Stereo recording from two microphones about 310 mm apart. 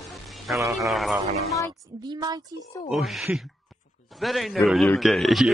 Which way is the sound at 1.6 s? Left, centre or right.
Centre.